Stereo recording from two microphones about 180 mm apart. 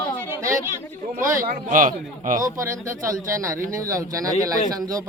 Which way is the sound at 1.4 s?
45° right (ahead or behind).